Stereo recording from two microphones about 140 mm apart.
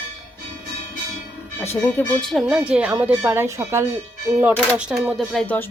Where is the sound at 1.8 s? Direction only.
5° left (ahead or behind).